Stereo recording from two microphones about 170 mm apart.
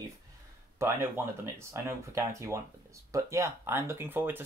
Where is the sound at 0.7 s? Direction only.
15° right (ahead or behind).